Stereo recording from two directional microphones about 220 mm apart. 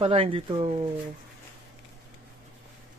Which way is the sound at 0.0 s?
25° right (ahead or behind).